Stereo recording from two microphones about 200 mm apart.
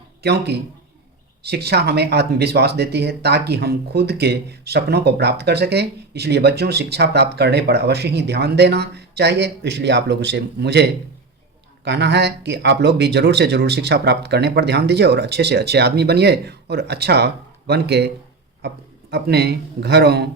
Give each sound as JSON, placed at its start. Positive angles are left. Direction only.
{"t": 0.2, "sound": "speech", "side_deg": -55}